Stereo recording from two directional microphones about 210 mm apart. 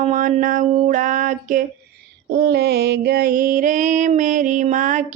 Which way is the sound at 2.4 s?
50° right (ahead or behind).